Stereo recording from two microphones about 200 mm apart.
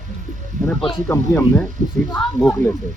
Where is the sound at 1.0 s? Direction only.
15° left (ahead or behind).